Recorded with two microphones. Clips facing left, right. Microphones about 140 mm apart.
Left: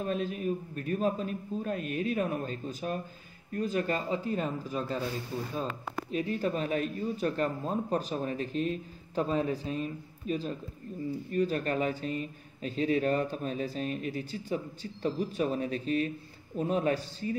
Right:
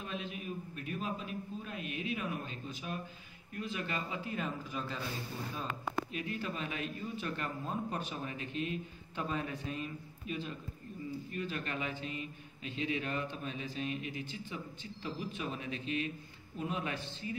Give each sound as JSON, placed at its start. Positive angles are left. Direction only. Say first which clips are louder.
{"t": 0.0, "sound": "a man's voice", "louder": "left 10 dB", "side_deg": 40}